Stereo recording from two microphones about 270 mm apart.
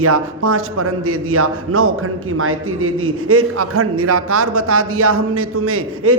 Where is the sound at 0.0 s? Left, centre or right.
Right.